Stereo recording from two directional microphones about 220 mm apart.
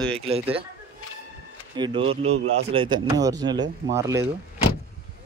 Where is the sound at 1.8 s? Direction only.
25° right (ahead or behind).